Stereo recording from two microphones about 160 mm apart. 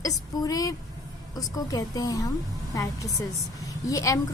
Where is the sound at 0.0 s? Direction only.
20° left (ahead or behind).